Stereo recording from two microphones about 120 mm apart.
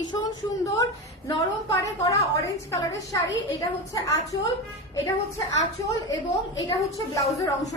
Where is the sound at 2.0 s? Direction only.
25° left (ahead or behind).